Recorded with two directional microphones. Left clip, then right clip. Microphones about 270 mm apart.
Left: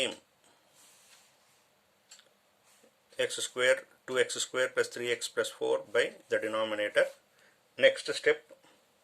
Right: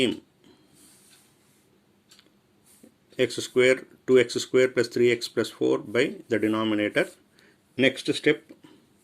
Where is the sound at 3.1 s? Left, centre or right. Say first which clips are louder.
Right 8 dB; centre.